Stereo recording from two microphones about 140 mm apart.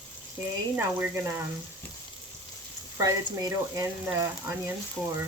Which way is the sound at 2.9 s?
25° right (ahead or behind).